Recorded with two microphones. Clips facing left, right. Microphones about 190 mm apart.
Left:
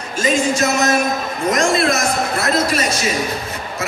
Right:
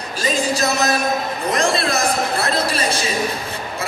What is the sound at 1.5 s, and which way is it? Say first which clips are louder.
Speech: left 3 dB; 35° right (ahead or behind).